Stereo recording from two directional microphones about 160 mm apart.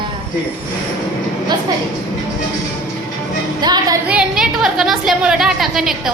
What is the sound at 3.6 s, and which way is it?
Music, 25° right (ahead or behind).